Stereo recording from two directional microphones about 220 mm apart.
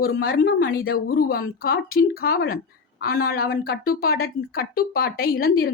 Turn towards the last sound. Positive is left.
turn(degrees=40)  # may be behind; listen again after turning